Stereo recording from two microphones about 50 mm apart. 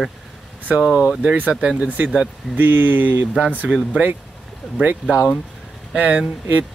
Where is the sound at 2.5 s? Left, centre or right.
Right.